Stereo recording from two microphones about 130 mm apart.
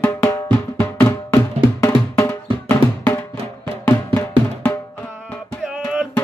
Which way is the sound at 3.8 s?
20° left (ahead or behind).